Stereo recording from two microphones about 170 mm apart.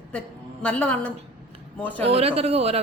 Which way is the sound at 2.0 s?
35° right (ahead or behind).